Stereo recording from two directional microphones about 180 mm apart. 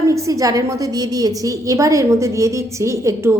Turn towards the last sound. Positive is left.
turn(degrees=-15)  # may be behind; listen again after turning